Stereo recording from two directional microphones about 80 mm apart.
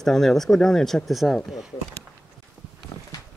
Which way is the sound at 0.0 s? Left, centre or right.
Centre.